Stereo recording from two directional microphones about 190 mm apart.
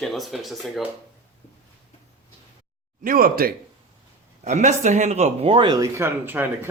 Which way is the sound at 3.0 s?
50° right (ahead or behind).